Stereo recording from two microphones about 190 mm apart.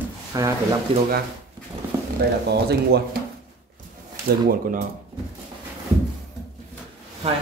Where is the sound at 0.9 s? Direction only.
30° right (ahead or behind).